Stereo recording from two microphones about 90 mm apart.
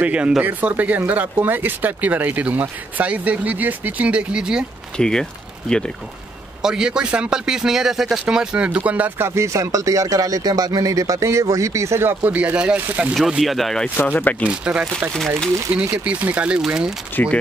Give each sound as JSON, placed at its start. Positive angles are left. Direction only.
{"t": 0.0, "sound": "speech", "side_deg": -10}
{"t": 4.9, "sound": "speech", "side_deg": 10}
{"t": 6.6, "sound": "speech", "side_deg": -10}
{"t": 9.3, "sound": "speech", "side_deg": -30}
{"t": 13.4, "sound": "speech", "side_deg": 0}
{"t": 13.9, "sound": "speech", "side_deg": 20}
{"t": 14.4, "sound": "speech", "side_deg": -10}
{"t": 15.1, "sound": "speech", "side_deg": 5}
{"t": 15.7, "sound": "speech", "side_deg": -15}
{"t": 17.1, "sound": "speech", "side_deg": 20}